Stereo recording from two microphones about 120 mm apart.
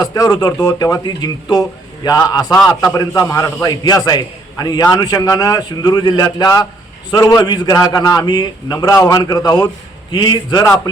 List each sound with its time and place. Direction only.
0.0 s a man's voice: 30° left (ahead or behind)